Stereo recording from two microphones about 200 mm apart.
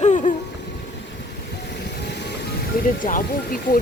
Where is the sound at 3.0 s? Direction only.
45° left (ahead or behind).